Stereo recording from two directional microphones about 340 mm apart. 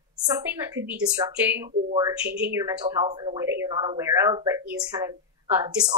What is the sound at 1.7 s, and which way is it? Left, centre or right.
Speech, centre.